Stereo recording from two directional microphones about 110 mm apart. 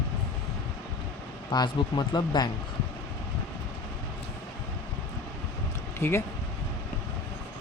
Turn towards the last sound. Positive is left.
turn(degrees=25)  # may be behind; listen again after turning